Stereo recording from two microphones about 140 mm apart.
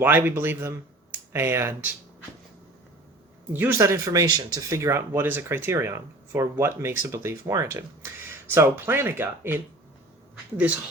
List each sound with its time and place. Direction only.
0.0 s speech: 15° right (ahead or behind)
3.5 s speech: 15° right (ahead or behind)